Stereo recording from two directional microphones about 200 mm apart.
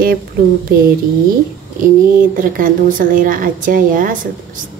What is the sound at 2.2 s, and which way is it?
Speech, 45° right (ahead or behind).